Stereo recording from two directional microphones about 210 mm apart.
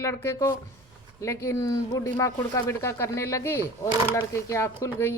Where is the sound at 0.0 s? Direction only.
10° left (ahead or behind).